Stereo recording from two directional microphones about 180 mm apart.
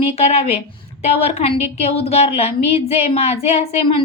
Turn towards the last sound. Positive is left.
turn(degrees=35)  # may be behind; listen again after turning